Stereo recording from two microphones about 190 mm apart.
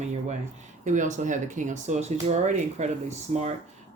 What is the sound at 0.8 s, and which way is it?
Speech, 40° right (ahead or behind).